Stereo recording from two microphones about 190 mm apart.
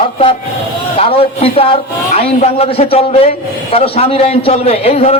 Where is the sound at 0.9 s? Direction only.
30° left (ahead or behind).